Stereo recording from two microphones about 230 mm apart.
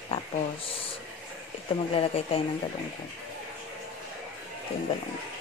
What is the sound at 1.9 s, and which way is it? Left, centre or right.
Speech, left.